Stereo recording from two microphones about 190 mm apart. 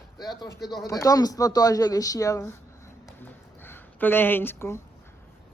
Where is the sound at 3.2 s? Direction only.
10° left (ahead or behind).